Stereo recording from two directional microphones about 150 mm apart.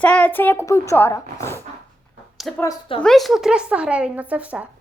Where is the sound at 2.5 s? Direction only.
Centre (ahead or behind).